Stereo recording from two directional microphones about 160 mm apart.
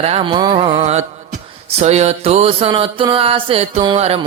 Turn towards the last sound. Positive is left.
turn(degrees=-40)  # may be behind; listen again after turning